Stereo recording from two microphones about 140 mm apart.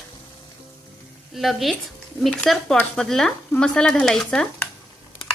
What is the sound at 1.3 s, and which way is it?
Speech, centre (ahead or behind).